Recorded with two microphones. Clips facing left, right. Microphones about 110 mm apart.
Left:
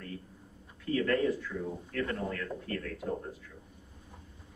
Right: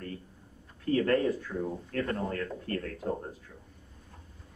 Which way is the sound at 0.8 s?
35° right (ahead or behind).